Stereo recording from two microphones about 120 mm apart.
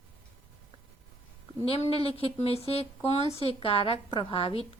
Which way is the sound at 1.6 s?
55° left (ahead or behind).